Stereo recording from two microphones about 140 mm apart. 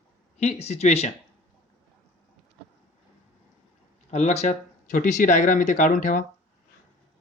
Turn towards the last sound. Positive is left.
turn(degrees=65)  # may be behind; listen again after turning